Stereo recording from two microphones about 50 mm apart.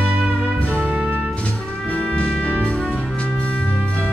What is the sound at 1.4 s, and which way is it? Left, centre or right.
Brass instrument, left.